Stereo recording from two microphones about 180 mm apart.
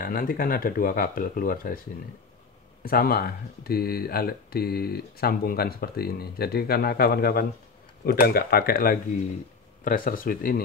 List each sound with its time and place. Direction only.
0.0 s speech: 55° left (ahead or behind)
2.8 s speech: 55° left (ahead or behind)